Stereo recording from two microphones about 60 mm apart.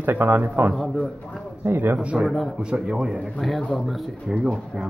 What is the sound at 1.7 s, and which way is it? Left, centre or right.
Speech, right.